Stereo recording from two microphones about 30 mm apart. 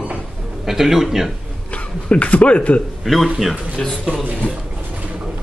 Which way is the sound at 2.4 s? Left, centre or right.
Left.